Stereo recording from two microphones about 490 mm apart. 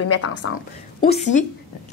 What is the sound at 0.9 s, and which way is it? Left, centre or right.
Speech, centre.